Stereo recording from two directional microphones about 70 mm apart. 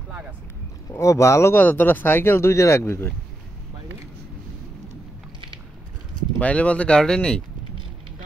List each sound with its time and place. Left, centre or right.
0.9 s speech: left
1.6 s speech: left
2.5 s speech: left
6.4 s speech: centre